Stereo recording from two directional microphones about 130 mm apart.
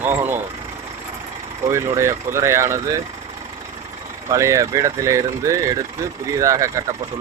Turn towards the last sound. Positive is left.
turn(degrees=-25)  # may be behind; listen again after turning